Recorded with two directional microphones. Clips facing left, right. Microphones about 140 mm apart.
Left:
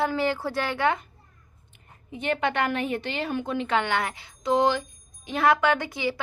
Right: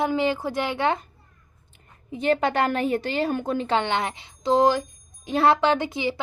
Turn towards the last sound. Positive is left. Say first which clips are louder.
# right 2 dB
turn(degrees=-20)  # may be behind; listen again after turning